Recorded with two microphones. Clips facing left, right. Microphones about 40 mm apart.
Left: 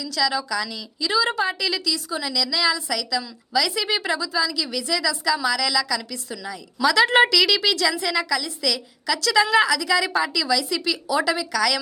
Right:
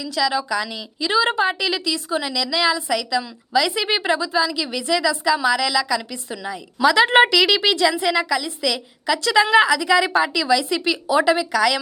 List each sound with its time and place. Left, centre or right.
0.0 s a woman's voice: right